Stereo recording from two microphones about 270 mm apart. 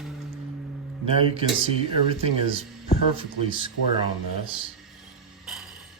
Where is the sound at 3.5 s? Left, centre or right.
Centre.